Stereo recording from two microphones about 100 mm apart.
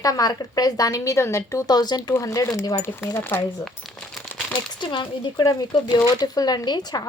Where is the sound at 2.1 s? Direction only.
30° left (ahead or behind).